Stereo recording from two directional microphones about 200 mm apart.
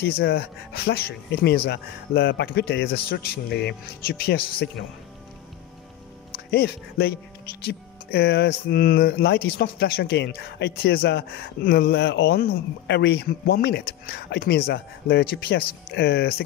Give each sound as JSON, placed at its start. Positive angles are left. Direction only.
{"t": 0.0, "sound": "speech", "side_deg": 50}
{"t": 6.5, "sound": "speech", "side_deg": 50}